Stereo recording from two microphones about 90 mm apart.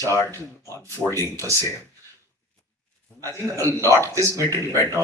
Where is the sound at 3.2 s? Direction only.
35° right (ahead or behind).